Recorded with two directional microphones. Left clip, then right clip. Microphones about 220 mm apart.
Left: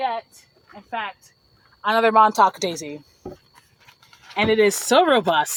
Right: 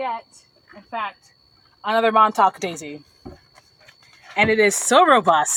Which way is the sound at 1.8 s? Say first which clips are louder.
Left 1 dB; 15° left (ahead or behind).